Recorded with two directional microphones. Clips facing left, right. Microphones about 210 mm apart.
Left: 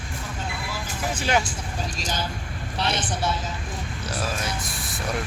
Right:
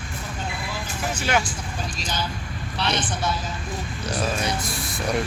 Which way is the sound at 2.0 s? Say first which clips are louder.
Even; 45° left (ahead or behind).